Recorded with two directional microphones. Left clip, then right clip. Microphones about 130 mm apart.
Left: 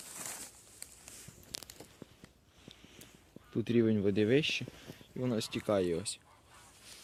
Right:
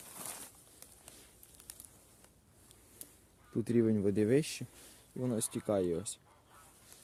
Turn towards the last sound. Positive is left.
turn(degrees=-5)  # may be behind; listen again after turning